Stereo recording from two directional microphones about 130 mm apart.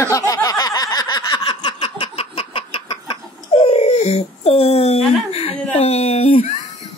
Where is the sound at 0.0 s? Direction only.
25° left (ahead or behind); by 6.5 s 55° left (ahead or behind).